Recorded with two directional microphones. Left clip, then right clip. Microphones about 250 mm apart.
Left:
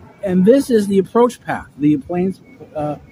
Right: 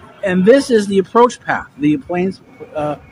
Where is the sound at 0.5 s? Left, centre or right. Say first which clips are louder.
Right 2 dB; centre.